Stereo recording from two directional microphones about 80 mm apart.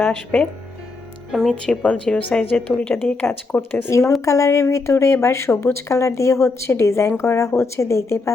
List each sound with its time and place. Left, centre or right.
0.1 s a woman's voice: centre
1.3 s a woman's voice: centre; by 3.9 s left
4.3 s a woman's voice: left